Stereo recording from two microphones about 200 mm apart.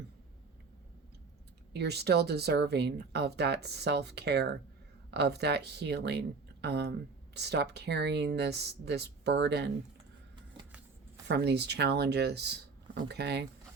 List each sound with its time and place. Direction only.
1.7 s speech: 55° right (ahead or behind)
11.3 s speech: 55° right (ahead or behind)